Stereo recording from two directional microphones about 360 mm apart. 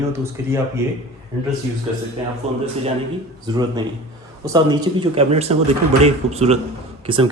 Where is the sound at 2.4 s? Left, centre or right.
Centre.